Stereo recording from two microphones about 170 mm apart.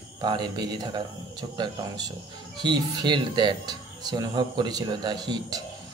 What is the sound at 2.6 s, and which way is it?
Speech, 25° right (ahead or behind).